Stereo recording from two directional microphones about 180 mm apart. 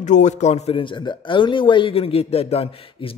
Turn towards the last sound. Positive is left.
turn(degrees=35)  # may be behind; listen again after turning